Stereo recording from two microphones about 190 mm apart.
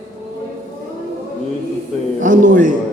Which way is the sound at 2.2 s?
45° right (ahead or behind).